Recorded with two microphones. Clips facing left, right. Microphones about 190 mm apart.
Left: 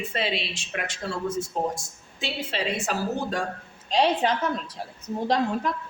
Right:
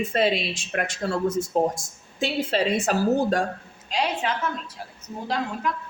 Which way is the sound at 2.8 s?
45° right (ahead or behind).